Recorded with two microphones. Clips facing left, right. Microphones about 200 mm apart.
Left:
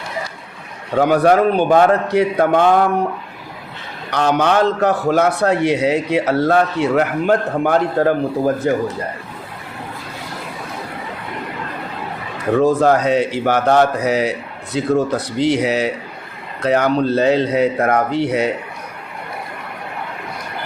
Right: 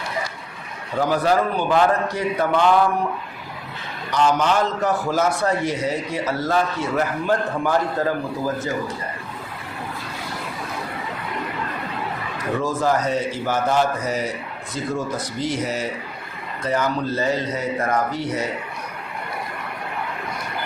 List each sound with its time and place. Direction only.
0.9 s a man's voice: 65° left (ahead or behind)
4.1 s a man's voice: 65° left (ahead or behind)
12.5 s speech: 65° left (ahead or behind)